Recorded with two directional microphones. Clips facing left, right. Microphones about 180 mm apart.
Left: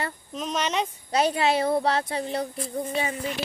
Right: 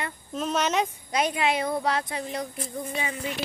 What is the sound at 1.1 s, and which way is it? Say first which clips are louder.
Child singing: left 3 dB; 30° left (ahead or behind).